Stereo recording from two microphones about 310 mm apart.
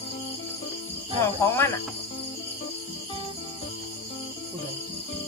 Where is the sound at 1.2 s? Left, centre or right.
Centre.